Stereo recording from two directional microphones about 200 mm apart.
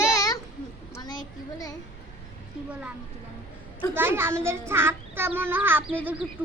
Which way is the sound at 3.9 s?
10° right (ahead or behind).